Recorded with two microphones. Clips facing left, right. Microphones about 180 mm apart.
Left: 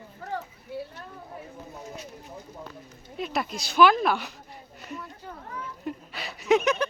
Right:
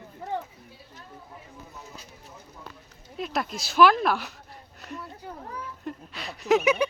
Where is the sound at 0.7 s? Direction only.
65° left (ahead or behind).